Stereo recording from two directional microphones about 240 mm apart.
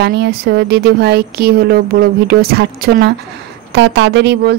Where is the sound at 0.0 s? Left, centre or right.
Right.